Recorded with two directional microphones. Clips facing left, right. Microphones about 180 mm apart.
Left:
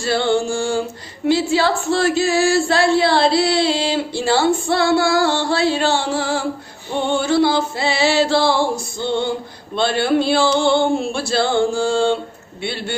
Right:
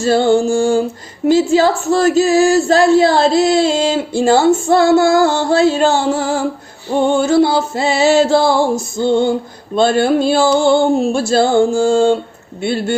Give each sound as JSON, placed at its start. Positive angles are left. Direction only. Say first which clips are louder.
{"t": 0.0, "sound": "speech", "louder": "right 6 dB", "side_deg": -45}